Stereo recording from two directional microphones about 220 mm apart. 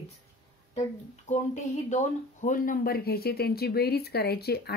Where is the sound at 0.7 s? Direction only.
30° left (ahead or behind).